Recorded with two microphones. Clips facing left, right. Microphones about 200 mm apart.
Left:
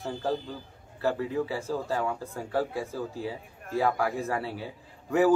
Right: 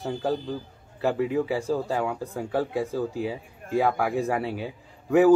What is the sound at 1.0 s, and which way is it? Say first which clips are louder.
Speech: right 4 dB; 15° right (ahead or behind).